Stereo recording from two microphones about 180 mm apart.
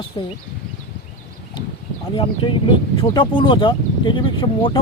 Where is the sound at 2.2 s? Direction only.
30° left (ahead or behind).